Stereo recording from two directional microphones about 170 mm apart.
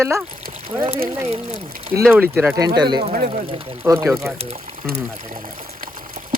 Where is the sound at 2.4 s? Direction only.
20° right (ahead or behind).